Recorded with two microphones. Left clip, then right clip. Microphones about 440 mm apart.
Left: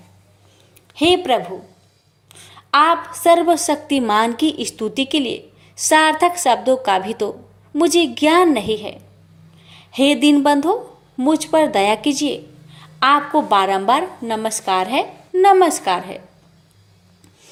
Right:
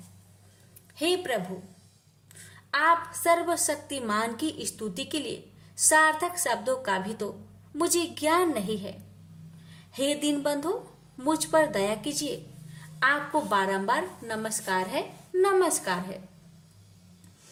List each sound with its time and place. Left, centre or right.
2.6 s a woman's voice: right